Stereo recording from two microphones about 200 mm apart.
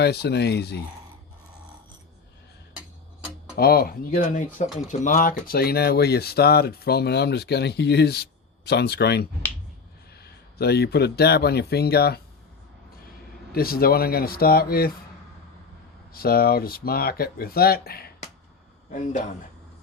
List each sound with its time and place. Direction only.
0.0 s speech: 55° left (ahead or behind)
3.5 s speech: 50° left (ahead or behind)
13.5 s speech: 50° left (ahead or behind)
16.1 s speech: 50° left (ahead or behind)